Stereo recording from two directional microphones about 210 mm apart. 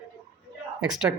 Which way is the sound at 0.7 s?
5° right (ahead or behind).